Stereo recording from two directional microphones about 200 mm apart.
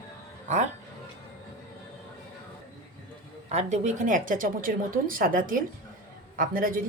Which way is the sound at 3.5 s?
35° right (ahead or behind).